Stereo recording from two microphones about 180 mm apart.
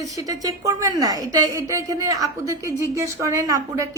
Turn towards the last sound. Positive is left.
turn(degrees=-20)  # may be behind; listen again after turning